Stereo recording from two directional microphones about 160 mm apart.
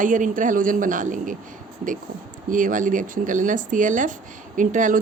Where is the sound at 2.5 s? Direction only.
55° right (ahead or behind).